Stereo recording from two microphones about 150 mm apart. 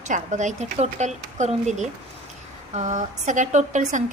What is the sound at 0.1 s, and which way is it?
A woman's voice, 55° right (ahead or behind).